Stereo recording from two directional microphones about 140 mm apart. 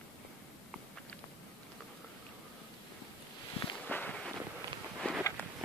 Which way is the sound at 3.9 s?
10° left (ahead or behind).